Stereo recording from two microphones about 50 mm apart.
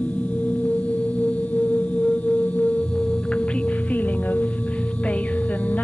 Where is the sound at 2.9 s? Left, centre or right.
Left.